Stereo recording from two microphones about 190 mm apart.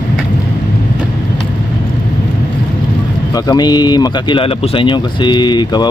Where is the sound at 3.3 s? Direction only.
20° left (ahead or behind).